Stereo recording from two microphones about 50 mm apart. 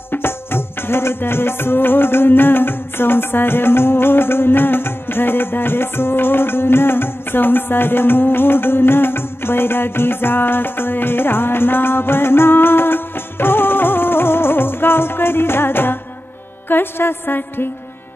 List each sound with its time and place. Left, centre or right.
0.1 s music: left
16.6 s a woman's voice: left